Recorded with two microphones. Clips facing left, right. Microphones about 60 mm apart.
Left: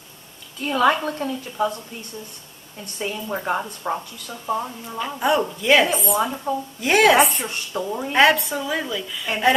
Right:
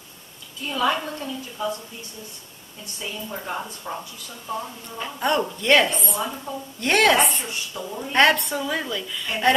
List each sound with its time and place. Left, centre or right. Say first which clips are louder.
0.6 s a woman's voice: left 5 dB; left
2.8 s a woman's voice: left 6 dB; left
3.3 s speech: left 7 dB; left
5.0 s a woman's voice: left 2 dB; centre
6.2 s a woman's voice: left 5 dB; centre
6.8 s a woman's voice: left 2 dB; centre
7.3 s a woman's voice: left 4 dB; left
8.1 s a woman's voice: left 1 dB; centre